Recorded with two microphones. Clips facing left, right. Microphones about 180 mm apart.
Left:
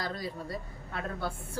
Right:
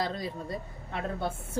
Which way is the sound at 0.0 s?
25° right (ahead or behind).